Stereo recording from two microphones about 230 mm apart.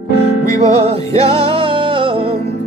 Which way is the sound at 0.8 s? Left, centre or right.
Right.